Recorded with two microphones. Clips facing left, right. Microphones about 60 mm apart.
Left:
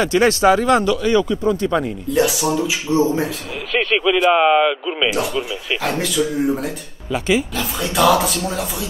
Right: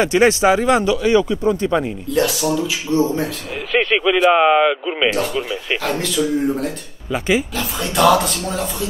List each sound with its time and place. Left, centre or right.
0.0 s speech: right
2.1 s speech: centre
2.5 s a man's voice: left
3.7 s speech: centre
5.8 s speech: centre